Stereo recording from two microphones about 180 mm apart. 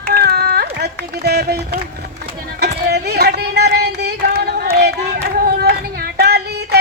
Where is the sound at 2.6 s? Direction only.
65° right (ahead or behind).